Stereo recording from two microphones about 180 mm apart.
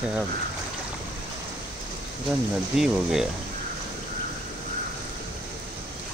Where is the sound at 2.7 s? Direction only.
Centre (ahead or behind).